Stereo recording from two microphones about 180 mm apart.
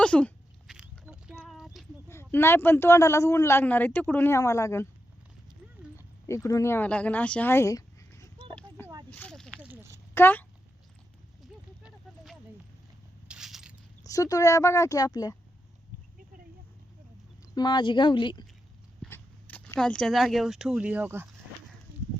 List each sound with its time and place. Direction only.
0.0 s a sound: 5° left (ahead or behind)
0.7 s biting: 5° right (ahead or behind)
1.5 s clip-clop: centre (ahead or behind)
2.0 s speech: 15° left (ahead or behind)
6.2 s speech: 15° left (ahead or behind)
9.0 s a sound: 5° left (ahead or behind)
9.6 s a sound: 10° right (ahead or behind)
10.2 s speech: 10° left (ahead or behind)
11.8 s a sound: 5° right (ahead or behind)
13.2 s crushing: 5° right (ahead or behind)
14.0 s speech: 20° left (ahead or behind)
17.5 s speech: 25° left (ahead or behind)
19.1 s speech: 10° left (ahead or behind); by 21.2 s 10° right (ahead or behind)